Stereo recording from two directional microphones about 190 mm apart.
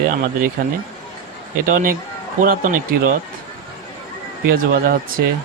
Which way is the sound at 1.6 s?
45° right (ahead or behind).